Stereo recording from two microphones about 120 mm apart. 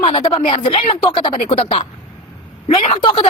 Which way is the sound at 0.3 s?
45° left (ahead or behind).